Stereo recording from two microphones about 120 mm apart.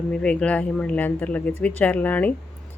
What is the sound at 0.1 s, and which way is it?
Speech, 5° left (ahead or behind).